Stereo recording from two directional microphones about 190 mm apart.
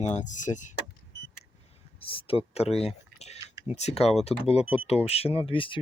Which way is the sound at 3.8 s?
35° left (ahead or behind).